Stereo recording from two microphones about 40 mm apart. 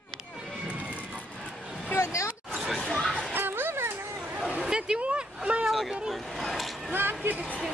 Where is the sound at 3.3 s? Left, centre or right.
Right.